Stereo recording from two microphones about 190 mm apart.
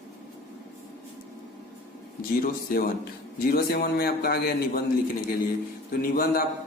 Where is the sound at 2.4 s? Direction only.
50° left (ahead or behind).